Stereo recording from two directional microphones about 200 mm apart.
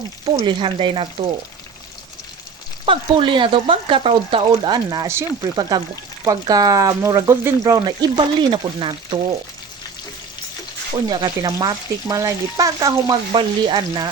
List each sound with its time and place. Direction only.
0.3 s frying: 25° right (ahead or behind)
2.8 s frying: 25° right (ahead or behind)
10.9 s frying: 20° right (ahead or behind)